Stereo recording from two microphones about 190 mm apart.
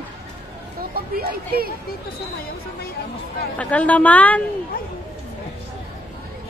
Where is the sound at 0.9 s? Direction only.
50° right (ahead or behind).